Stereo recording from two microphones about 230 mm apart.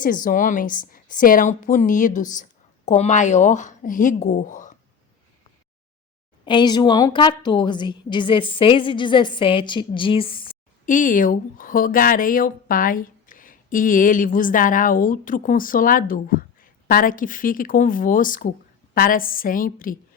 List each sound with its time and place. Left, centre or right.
0.0 s a woman's voice: left
6.4 s a woman's voice: centre
10.8 s a woman's voice: left